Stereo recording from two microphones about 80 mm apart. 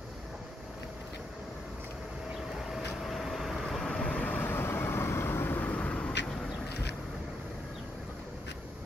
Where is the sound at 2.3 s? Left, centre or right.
Centre.